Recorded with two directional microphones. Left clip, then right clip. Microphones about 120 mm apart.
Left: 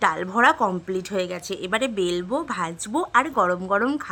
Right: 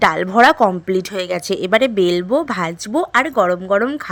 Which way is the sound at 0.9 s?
45° right (ahead or behind).